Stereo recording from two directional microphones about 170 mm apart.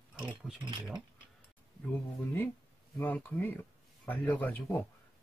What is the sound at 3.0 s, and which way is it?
Speech, 10° left (ahead or behind).